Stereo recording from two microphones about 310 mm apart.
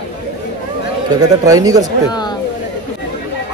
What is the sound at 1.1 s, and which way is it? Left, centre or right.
Speech, centre.